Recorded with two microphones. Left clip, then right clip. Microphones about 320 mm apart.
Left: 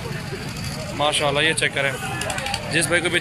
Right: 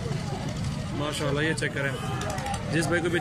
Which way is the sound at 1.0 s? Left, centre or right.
Centre.